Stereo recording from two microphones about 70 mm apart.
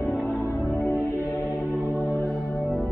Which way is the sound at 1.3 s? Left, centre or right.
Left.